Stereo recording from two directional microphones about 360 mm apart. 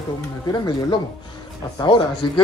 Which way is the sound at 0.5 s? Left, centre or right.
Centre.